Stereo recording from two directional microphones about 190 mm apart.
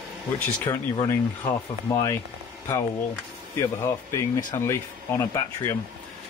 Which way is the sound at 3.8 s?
15° left (ahead or behind).